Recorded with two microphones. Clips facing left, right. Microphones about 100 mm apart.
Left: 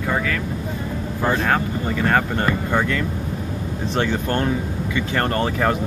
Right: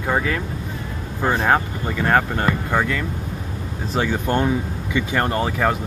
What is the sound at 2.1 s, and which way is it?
Speech, 10° right (ahead or behind).